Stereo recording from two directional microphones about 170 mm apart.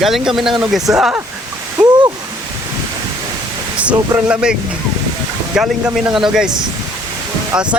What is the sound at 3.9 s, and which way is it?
Speech, 25° right (ahead or behind).